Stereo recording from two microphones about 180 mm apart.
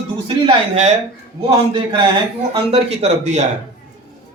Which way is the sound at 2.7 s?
40° right (ahead or behind).